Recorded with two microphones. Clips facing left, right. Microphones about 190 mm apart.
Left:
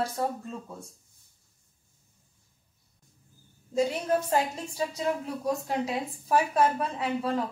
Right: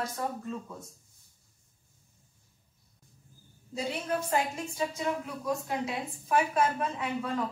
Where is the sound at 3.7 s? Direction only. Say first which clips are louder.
Left 6 dB; 40° left (ahead or behind).